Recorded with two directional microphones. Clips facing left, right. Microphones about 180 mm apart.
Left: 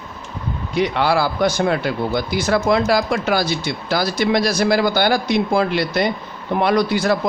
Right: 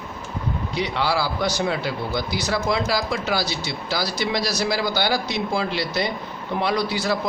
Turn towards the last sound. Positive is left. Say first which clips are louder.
# left 6 dB
turn(degrees=55)  # may be behind; listen again after turning